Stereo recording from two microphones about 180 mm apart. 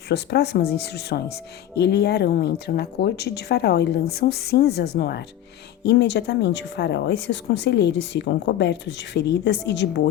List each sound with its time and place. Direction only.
0.1 s speech: 65° left (ahead or behind)